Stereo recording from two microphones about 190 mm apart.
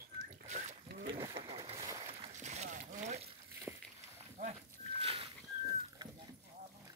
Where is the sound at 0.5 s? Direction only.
40° right (ahead or behind).